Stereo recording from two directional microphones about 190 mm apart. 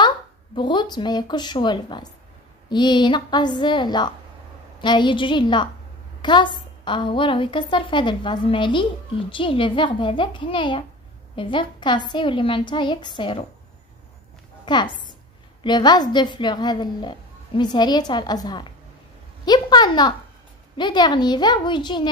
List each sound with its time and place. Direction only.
0.6 s a woman's voice: 25° left (ahead or behind)
14.6 s a woman's voice: 25° left (ahead or behind)